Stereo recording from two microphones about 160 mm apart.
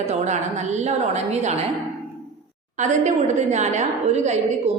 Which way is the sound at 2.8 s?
45° right (ahead or behind).